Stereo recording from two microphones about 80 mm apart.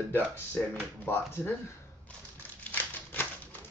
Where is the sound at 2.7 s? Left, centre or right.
Left.